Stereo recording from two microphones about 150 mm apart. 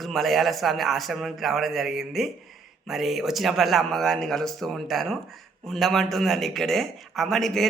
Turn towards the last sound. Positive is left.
turn(degrees=0)  # may be behind; listen again after turning